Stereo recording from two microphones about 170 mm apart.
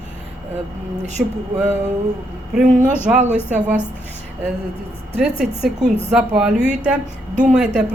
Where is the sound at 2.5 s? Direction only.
5° right (ahead or behind).